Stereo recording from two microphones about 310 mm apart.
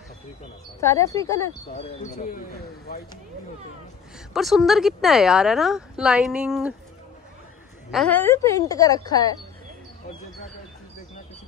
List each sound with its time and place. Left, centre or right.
0.7 s a woman's voice: centre
4.3 s speech: centre
7.9 s a woman's voice: centre